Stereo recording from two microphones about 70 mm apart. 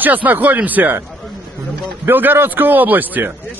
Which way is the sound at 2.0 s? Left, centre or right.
Right.